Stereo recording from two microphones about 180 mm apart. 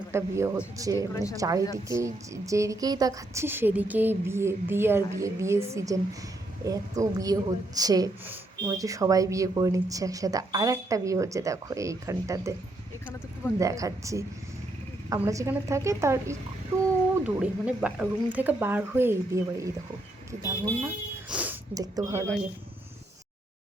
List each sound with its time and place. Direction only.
0.1 s speech: 15° right (ahead or behind)
1.1 s speech: 20° left (ahead or behind)
1.4 s speech: 20° right (ahead or behind)
13.6 s speech: 20° right (ahead or behind)
20.8 s speech: 10° right (ahead or behind)